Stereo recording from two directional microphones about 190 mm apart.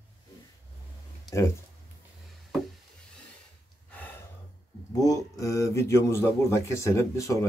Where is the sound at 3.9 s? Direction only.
10° left (ahead or behind).